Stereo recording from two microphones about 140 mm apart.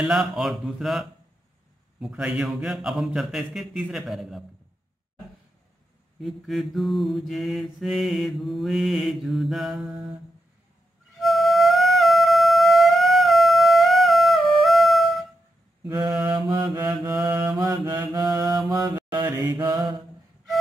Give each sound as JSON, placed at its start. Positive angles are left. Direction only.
{"t": 0.0, "sound": "mantra", "side_deg": -5}
{"t": 6.2, "sound": "mantra", "side_deg": 0}
{"t": 11.1, "sound": "music", "side_deg": 0}
{"t": 16.1, "sound": "mantra", "side_deg": -5}
{"t": 16.3, "sound": "mantra", "side_deg": -30}
{"t": 16.6, "sound": "mantra", "side_deg": -15}
{"t": 18.2, "sound": "mantra", "side_deg": -30}